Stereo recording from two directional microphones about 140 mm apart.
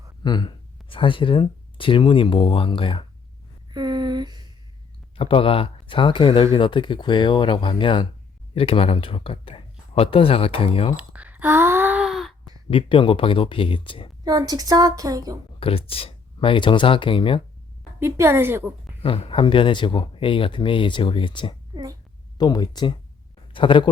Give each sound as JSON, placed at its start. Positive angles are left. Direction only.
{"t": 0.2, "sound": "speech", "side_deg": 30}
{"t": 3.7, "sound": "a sound", "side_deg": -30}
{"t": 5.1, "sound": "speech", "side_deg": 40}
{"t": 10.9, "sound": "a sound", "side_deg": -10}
{"t": 12.7, "sound": "speech", "side_deg": 35}
{"t": 14.3, "sound": "a woman's voice", "side_deg": -30}
{"t": 15.6, "sound": "speech", "side_deg": 40}
{"t": 18.0, "sound": "a woman's voice", "side_deg": -15}
{"t": 19.0, "sound": "speech", "side_deg": 40}